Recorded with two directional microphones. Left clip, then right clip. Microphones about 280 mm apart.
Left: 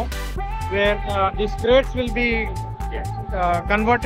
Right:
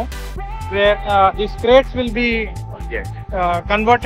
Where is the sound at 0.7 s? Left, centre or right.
Centre.